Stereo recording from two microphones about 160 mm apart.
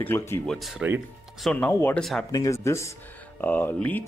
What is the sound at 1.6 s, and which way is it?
Speech, 15° left (ahead or behind).